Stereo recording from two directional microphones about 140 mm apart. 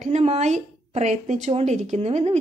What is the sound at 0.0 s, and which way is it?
A woman's voice, 50° right (ahead or behind).